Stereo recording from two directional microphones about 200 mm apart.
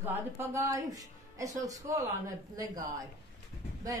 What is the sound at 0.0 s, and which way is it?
Speech, 15° right (ahead or behind).